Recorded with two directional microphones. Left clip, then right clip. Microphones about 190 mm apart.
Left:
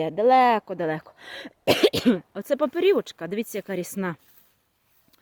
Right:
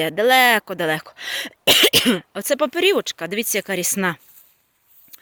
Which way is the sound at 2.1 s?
5° right (ahead or behind).